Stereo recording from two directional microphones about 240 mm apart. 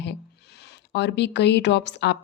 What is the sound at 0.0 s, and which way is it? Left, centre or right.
Speech, left.